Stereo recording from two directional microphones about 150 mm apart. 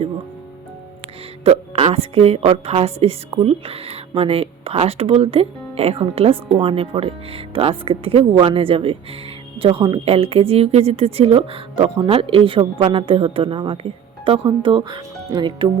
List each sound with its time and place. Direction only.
1.5 s a woman's voice: 40° right (ahead or behind)